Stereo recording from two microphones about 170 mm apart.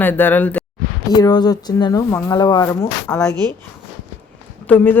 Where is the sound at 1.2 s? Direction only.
25° left (ahead or behind).